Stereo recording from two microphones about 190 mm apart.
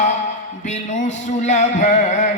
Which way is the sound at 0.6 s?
40° left (ahead or behind).